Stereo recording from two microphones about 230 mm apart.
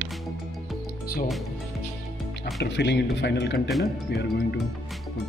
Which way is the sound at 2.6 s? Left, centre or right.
Left.